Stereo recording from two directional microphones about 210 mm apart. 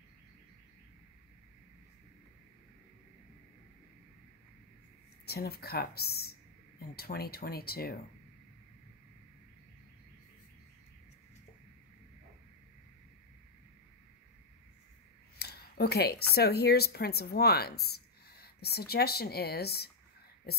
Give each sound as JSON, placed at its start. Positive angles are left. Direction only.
{"t": 5.2, "sound": "speech", "side_deg": 50}
{"t": 15.3, "sound": "speech", "side_deg": 50}